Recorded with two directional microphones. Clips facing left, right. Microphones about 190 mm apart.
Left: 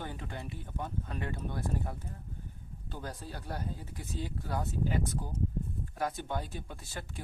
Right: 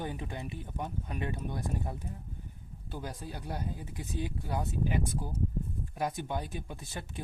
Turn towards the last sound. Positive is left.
turn(degrees=-20)  # may be behind; listen again after turning